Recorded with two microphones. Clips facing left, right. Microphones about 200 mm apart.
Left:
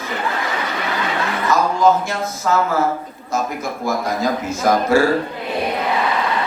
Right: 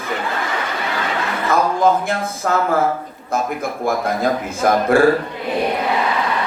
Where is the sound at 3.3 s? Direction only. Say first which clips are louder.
Right 1 dB; 55° right (ahead or behind).